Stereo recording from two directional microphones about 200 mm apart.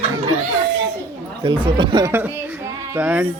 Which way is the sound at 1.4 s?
25° right (ahead or behind).